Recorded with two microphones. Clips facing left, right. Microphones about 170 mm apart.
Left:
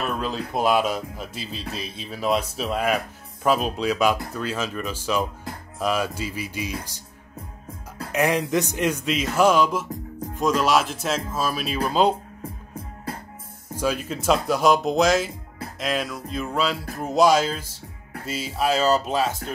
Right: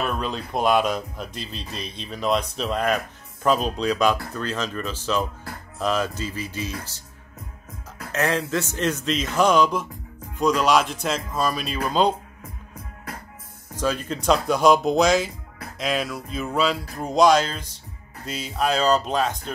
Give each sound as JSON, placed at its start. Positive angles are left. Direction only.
{"t": 0.0, "sound": "speech", "side_deg": 0}
{"t": 8.1, "sound": "speech", "side_deg": 15}
{"t": 13.1, "sound": "music", "side_deg": 30}
{"t": 13.7, "sound": "speech", "side_deg": 10}